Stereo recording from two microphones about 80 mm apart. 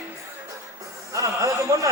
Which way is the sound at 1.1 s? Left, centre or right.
Right.